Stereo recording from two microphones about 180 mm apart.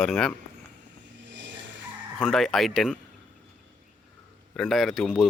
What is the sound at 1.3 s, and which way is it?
Vehicle, 90° right.